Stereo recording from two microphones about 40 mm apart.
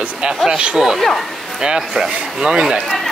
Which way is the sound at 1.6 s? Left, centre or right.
Right.